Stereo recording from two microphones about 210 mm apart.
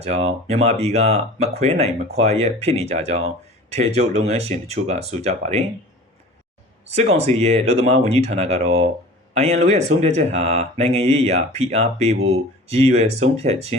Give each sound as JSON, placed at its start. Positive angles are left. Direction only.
{"t": 0.0, "sound": "speech", "side_deg": -30}
{"t": 7.2, "sound": "speech", "side_deg": -30}